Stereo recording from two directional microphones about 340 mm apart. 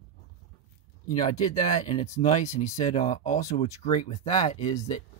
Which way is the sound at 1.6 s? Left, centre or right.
Centre.